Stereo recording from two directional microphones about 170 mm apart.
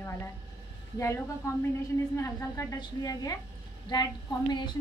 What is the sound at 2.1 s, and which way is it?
A woman's voice, 20° left (ahead or behind).